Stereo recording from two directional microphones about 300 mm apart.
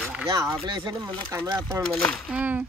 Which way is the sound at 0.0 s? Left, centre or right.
Centre.